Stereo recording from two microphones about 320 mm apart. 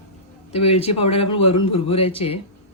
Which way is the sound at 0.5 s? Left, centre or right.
Centre.